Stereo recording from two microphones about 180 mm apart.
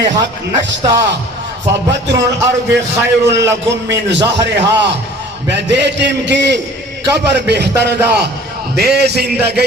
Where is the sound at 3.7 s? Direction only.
75° right (ahead or behind).